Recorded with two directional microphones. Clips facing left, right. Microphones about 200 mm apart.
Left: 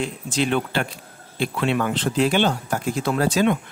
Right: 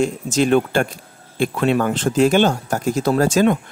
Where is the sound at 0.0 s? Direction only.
45° right (ahead or behind).